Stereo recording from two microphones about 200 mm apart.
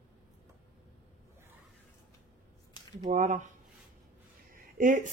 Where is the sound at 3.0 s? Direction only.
40° right (ahead or behind).